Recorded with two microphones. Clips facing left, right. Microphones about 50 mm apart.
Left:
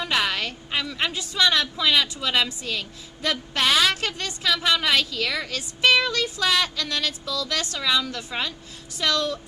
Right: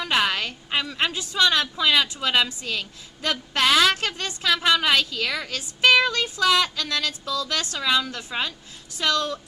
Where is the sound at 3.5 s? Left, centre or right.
Right.